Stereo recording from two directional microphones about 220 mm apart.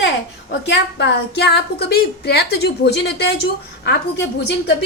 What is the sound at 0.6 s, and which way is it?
A woman's voice, 50° left (ahead or behind).